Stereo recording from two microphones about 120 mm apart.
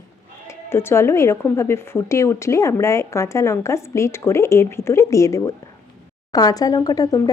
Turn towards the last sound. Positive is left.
turn(degrees=30)  # may be behind; listen again after turning